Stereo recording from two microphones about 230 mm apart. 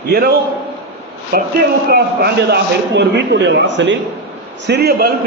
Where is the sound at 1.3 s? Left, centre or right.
Right.